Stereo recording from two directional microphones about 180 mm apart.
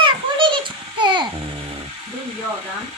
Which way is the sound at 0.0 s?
25° right (ahead or behind).